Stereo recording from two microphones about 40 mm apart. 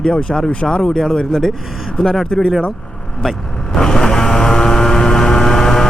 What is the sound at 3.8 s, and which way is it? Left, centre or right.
Vehicle, centre.